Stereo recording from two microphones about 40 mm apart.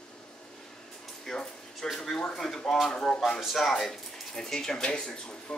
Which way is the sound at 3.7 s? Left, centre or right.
Centre.